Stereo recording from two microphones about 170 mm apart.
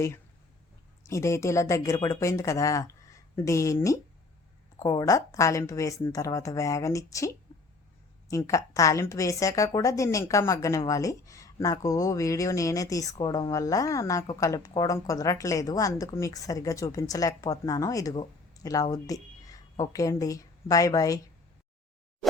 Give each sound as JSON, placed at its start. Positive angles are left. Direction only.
{"t": 1.0, "sound": "a woman's voice", "side_deg": 15}